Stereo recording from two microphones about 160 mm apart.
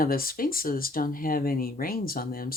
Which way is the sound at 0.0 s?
65° left (ahead or behind).